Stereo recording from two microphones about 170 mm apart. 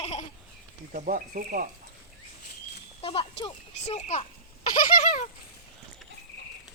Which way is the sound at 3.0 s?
30° left (ahead or behind).